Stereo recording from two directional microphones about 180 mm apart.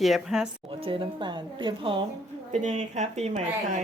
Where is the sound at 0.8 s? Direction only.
30° right (ahead or behind).